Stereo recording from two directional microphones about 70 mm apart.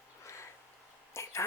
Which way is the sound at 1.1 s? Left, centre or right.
Left.